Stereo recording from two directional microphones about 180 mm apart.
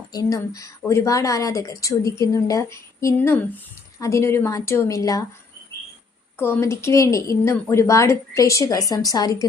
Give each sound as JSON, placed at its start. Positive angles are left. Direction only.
{"t": 0.1, "sound": "speech", "side_deg": 20}
{"t": 6.4, "sound": "a woman's voice", "side_deg": 15}